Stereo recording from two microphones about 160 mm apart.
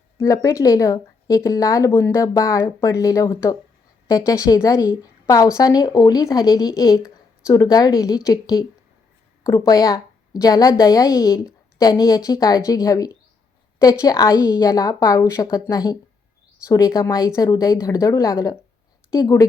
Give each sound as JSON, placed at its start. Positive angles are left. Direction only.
{"t": 0.2, "sound": "a woman's voice", "side_deg": 20}